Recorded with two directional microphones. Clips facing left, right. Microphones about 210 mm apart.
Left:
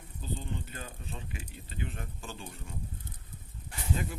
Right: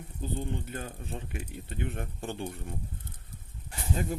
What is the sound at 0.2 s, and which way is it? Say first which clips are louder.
Speech: right 4 dB; 55° right (ahead or behind).